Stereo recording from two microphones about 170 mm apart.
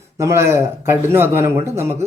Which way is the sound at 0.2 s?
15° right (ahead or behind).